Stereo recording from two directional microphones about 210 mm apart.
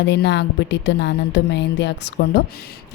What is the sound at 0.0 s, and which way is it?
A woman's voice, 55° left (ahead or behind).